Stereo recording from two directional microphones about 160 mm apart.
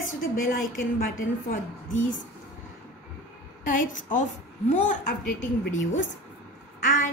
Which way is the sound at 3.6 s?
55° left (ahead or behind).